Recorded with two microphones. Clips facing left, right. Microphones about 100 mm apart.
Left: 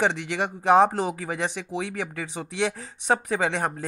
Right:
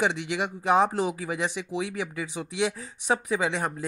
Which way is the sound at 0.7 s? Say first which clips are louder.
Left 4 dB; 40° left (ahead or behind).